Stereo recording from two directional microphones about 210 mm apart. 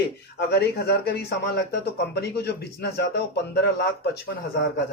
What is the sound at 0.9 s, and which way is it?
A man's voice, 50° left (ahead or behind).